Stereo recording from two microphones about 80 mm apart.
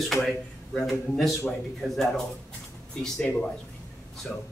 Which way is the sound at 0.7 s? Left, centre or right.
Centre.